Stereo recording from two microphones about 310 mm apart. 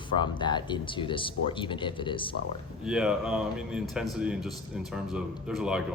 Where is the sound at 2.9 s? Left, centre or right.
Centre.